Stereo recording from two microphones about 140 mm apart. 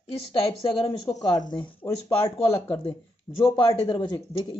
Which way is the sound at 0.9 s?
35° left (ahead or behind).